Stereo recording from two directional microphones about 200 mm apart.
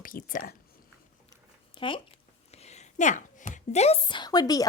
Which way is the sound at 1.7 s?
25° left (ahead or behind).